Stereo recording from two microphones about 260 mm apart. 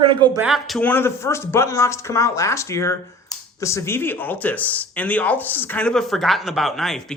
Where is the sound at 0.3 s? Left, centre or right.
Centre.